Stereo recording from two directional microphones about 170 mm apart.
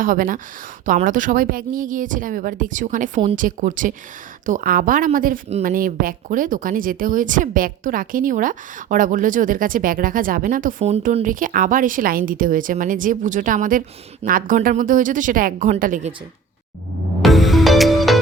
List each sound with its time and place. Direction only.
0.0 s speech: 55° right (ahead or behind)
17.2 s music: centre (ahead or behind)